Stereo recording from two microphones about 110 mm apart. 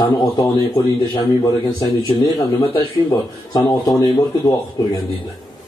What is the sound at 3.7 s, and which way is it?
Speech, 35° left (ahead or behind).